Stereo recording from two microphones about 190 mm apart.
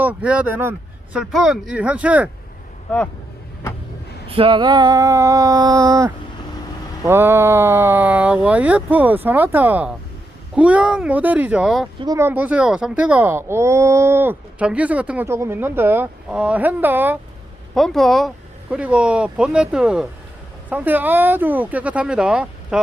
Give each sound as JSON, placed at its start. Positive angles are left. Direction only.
{"t": 0.0, "sound": "speech", "side_deg": -5}
{"t": 4.3, "sound": "a sound", "side_deg": -30}
{"t": 7.0, "sound": "speech", "side_deg": -10}
{"t": 12.0, "sound": "speech", "side_deg": -15}
{"t": 17.7, "sound": "speech", "side_deg": 0}